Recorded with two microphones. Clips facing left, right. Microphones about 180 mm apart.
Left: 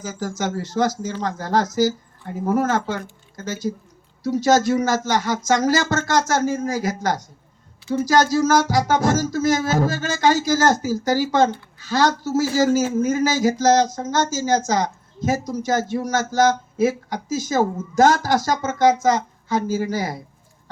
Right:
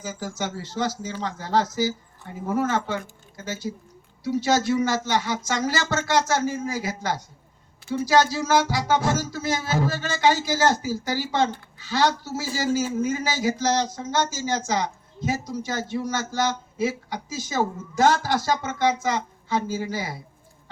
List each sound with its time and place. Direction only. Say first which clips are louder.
0.0 s speech: left 4 dB; 45° left (ahead or behind)